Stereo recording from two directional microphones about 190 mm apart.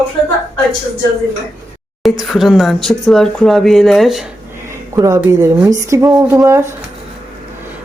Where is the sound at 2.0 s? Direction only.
Centre (ahead or behind).